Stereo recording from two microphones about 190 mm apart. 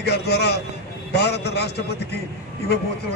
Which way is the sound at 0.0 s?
60° left (ahead or behind).